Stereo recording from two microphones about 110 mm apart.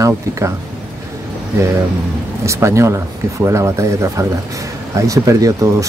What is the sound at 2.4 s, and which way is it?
Speech, 25° right (ahead or behind).